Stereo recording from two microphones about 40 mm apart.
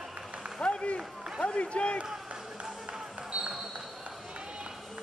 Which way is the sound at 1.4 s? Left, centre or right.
Left.